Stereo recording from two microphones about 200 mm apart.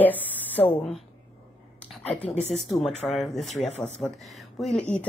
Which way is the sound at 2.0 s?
30° left (ahead or behind).